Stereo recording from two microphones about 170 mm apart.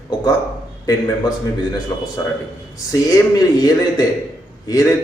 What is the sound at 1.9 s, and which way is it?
Speech, 20° left (ahead or behind).